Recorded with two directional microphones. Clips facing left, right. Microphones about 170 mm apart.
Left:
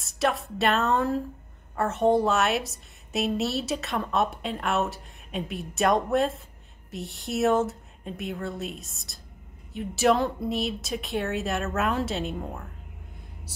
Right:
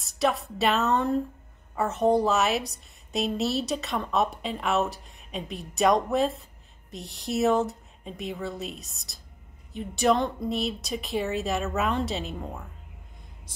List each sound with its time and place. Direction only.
0.0 s a woman's voice: centre (ahead or behind)